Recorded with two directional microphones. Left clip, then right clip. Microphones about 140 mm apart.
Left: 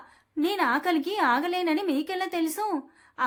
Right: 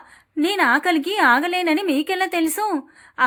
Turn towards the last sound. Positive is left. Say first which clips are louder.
# right 7 dB
turn(degrees=-30)  # may be behind; listen again after turning